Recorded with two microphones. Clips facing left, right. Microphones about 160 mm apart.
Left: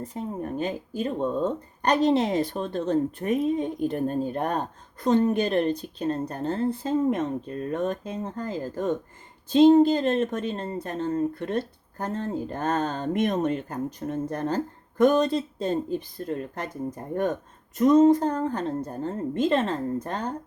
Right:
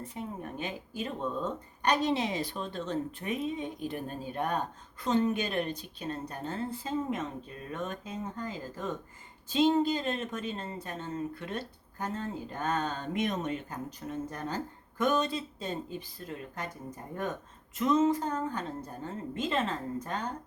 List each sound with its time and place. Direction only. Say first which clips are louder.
0.0 s speech: left 7 dB; 40° left (ahead or behind)
17.7 s speech: left 9 dB; 40° left (ahead or behind)